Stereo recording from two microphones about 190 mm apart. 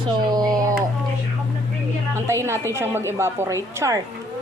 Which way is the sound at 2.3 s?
15° right (ahead or behind).